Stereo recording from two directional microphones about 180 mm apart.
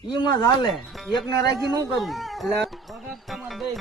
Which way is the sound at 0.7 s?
Centre (ahead or behind).